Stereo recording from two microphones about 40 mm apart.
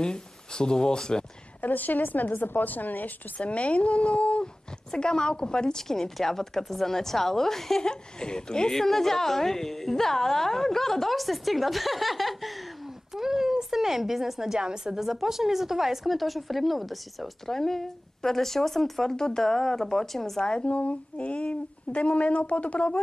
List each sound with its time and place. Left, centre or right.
0.0 s speech: centre
1.6 s a woman's voice: left
3.3 s speech: left
4.9 s a woman's voice: left
7.9 s speech: centre
8.7 s a woman's voice: centre
14.6 s a woman's voice: centre
15.0 s speech: centre
17.5 s a woman's voice: centre
20.4 s speech: left
20.7 s speech: left